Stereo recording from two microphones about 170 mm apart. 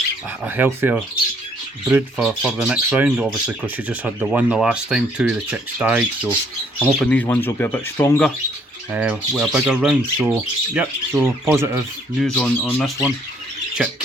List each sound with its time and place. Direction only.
0.4 s speech: 10° right (ahead or behind); by 8.2 s 15° left (ahead or behind)
8.9 s speech: 10° right (ahead or behind)
12.2 s speech: 5° left (ahead or behind)